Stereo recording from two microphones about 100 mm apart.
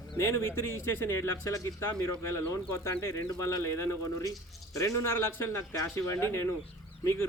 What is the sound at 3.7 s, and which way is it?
A man's voice, 25° left (ahead or behind).